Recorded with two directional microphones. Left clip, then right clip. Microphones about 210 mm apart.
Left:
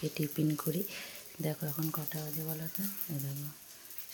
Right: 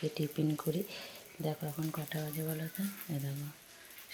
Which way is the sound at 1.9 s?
Centre (ahead or behind).